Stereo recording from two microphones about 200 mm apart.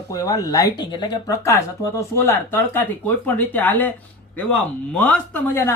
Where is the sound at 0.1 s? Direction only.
20° left (ahead or behind).